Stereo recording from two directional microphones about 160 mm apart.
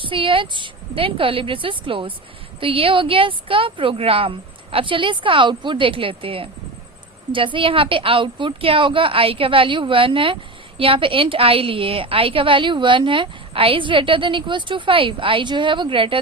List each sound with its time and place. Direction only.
0.0 s a woman's voice: 35° right (ahead or behind)